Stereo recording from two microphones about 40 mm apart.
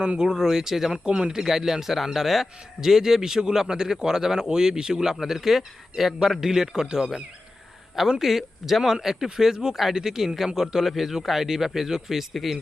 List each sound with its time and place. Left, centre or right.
0.0 s a man's voice: right
0.3 s speech: centre
1.0 s a man's voice: right
1.4 s speech: centre
8.2 s speech: centre